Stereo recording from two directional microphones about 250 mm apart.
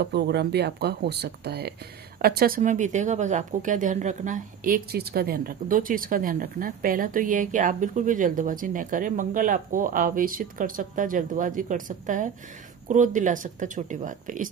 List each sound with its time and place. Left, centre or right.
0.0 s a woman's voice: right